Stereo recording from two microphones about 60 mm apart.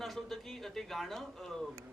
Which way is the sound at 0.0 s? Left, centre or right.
Centre.